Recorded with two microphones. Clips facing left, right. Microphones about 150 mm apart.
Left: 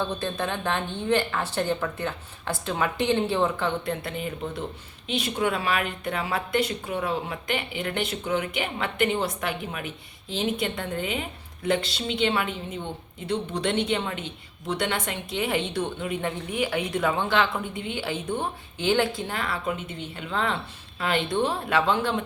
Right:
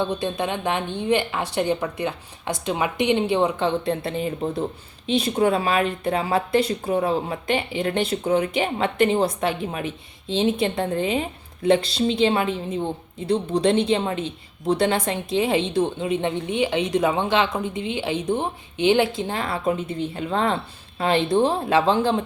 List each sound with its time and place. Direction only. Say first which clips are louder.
0.0 s a woman's voice: right 4 dB; 15° right (ahead or behind)